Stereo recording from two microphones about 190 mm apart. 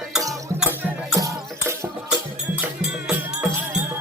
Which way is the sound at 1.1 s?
20° right (ahead or behind).